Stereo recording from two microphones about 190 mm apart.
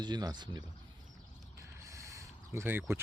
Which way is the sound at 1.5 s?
15° right (ahead or behind).